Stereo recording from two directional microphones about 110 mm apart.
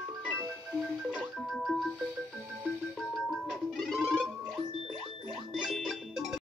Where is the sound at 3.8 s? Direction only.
Centre (ahead or behind).